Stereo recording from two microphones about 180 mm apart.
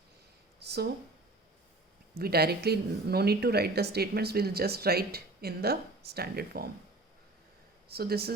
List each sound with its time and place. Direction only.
0.6 s a sound: 65° right (ahead or behind)
2.1 s speech: 60° right (ahead or behind)
7.9 s speech: 60° right (ahead or behind)